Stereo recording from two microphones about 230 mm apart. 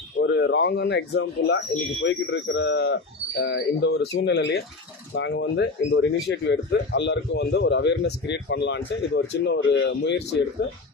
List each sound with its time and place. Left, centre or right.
0.2 s speech: left